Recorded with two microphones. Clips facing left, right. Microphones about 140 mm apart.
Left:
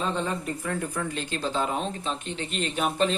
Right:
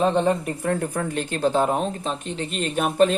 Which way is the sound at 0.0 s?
60° right (ahead or behind).